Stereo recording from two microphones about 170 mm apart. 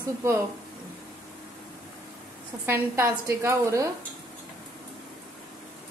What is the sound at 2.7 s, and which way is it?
A woman's voice, 15° right (ahead or behind).